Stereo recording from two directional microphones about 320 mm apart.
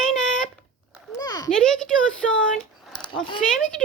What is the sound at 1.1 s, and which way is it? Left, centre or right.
Speech, centre.